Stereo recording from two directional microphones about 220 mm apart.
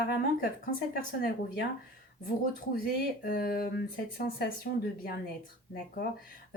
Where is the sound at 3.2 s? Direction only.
45° left (ahead or behind).